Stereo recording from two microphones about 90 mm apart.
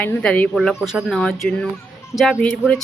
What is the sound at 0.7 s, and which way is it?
Speech, 5° right (ahead or behind).